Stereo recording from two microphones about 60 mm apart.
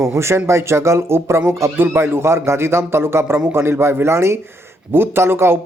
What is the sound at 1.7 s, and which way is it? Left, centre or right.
Speech, right.